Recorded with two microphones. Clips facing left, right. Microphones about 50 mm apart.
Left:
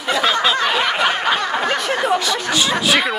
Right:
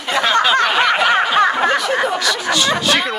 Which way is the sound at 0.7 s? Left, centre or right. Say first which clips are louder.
Right 4 dB; right.